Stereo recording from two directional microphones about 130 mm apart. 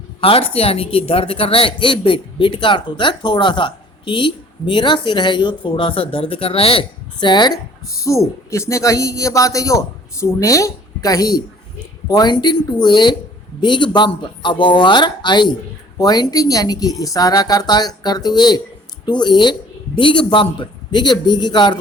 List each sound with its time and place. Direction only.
0.2 s a woman's voice: 45° left (ahead or behind)